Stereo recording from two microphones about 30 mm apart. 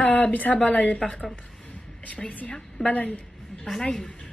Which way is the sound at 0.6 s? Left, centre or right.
Left.